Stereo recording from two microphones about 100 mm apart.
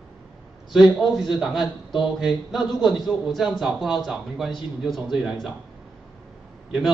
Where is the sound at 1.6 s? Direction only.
50° left (ahead or behind).